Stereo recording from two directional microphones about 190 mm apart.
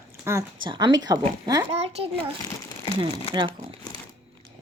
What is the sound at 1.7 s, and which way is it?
Speech, 35° right (ahead or behind).